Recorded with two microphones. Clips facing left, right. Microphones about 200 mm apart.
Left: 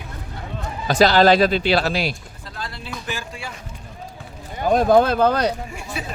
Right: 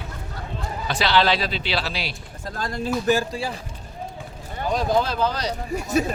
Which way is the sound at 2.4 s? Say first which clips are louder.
Right 12 dB; 45° right (ahead or behind).